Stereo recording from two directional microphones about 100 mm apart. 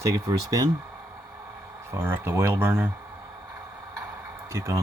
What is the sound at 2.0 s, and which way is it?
Speech, 25° right (ahead or behind).